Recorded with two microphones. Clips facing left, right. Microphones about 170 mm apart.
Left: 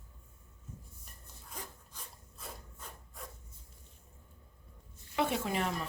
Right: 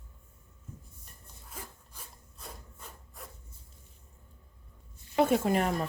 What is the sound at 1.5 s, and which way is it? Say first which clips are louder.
Sawing: even; 5° right (ahead or behind).